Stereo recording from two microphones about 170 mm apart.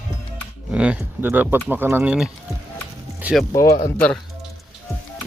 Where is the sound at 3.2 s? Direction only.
5° right (ahead or behind).